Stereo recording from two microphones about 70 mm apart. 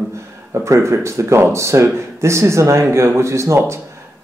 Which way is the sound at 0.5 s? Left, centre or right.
Right.